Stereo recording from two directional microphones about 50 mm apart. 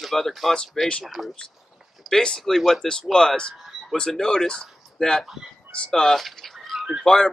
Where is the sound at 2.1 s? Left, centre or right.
Centre.